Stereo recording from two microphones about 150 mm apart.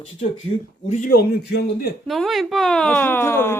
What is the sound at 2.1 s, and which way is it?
Speech, centre (ahead or behind).